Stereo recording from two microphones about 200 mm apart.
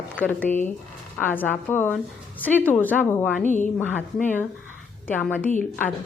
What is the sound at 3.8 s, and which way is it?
A woman's voice, 5° left (ahead or behind).